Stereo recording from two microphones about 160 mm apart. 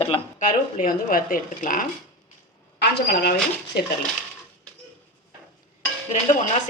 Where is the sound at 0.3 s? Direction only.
60° left (ahead or behind).